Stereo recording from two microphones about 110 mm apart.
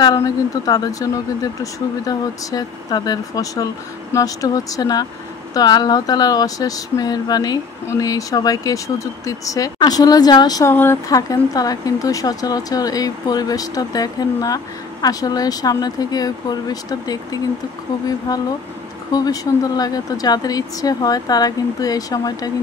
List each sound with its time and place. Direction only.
0.0 s speech: 35° left (ahead or behind)
10.6 s speech: 20° left (ahead or behind)
11.1 s speech: 30° left (ahead or behind)